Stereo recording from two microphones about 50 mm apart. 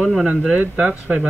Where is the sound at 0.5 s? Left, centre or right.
Centre.